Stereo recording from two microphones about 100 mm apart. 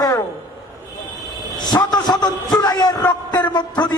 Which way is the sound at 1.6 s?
45° left (ahead or behind).